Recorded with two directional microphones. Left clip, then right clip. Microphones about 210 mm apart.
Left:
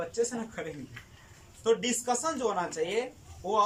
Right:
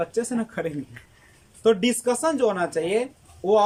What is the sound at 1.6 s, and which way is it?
Speech, 55° right (ahead or behind).